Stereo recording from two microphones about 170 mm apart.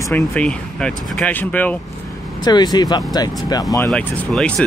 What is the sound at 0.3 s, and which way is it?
Speech, 5° left (ahead or behind).